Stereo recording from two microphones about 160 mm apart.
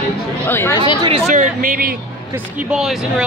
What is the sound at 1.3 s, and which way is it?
Speech, 55° right (ahead or behind).